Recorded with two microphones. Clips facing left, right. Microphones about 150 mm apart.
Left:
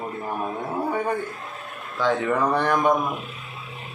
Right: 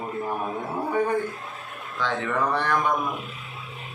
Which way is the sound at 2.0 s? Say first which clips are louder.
Left 4 dB; 10° left (ahead or behind).